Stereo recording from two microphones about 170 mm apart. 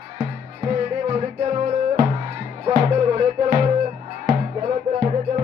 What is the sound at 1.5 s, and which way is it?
Music, 50° right (ahead or behind).